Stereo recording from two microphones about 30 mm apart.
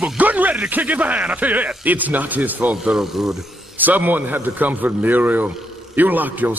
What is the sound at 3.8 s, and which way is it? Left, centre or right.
Speech, right.